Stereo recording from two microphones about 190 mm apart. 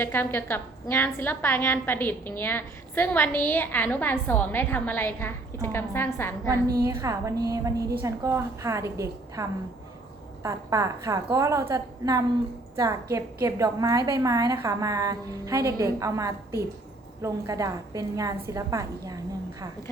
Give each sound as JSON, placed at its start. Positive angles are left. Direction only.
{"t": 0.0, "sound": "a woman's voice", "side_deg": 10}
{"t": 6.8, "sound": "a woman's voice", "side_deg": -15}